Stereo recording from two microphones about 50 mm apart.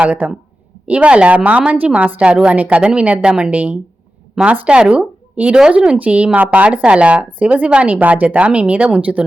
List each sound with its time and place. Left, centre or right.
0.0 s a woman's voice: right
3.5 s a woman's voice: right